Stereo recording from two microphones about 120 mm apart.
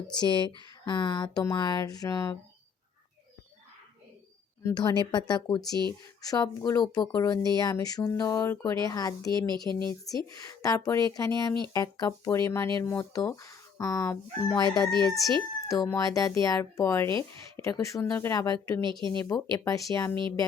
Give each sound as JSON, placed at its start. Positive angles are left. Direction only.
{"t": 0.2, "sound": "speech", "side_deg": 40}
{"t": 4.8, "sound": "speech", "side_deg": 35}
{"t": 14.6, "sound": "speech", "side_deg": 35}
{"t": 14.8, "sound": "speech", "side_deg": -40}
{"t": 15.6, "sound": "speech", "side_deg": 25}
{"t": 18.8, "sound": "speech", "side_deg": -40}
{"t": 19.2, "sound": "speech", "side_deg": 30}